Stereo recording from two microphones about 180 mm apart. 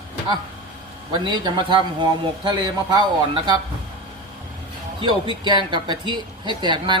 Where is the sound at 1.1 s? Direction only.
25° right (ahead or behind).